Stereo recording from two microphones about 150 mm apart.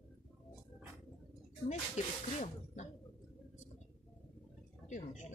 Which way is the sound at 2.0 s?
50° left (ahead or behind).